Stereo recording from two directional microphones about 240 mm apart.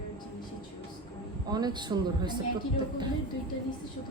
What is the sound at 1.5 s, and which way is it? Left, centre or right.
Speech, centre.